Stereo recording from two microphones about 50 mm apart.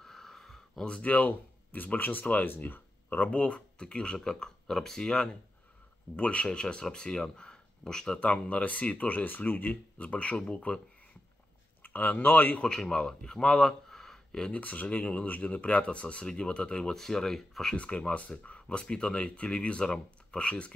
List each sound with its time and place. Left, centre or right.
0.0 s a sound: centre
0.8 s speech: left
1.1 s speech: left
3.3 s speech: left
6.1 s speech: left
8.2 s speech: left
11.8 s speech: left
12.6 s a man's voice: centre
14.5 s speech: left; by 17.7 s centre
17.7 s speech: left